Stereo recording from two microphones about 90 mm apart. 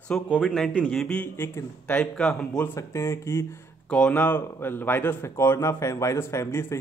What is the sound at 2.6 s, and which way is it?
Speech, 30° left (ahead or behind).